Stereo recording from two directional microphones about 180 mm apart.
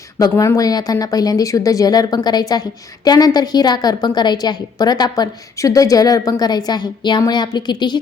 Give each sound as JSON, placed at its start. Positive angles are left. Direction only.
{"t": 0.2, "sound": "speech", "side_deg": 15}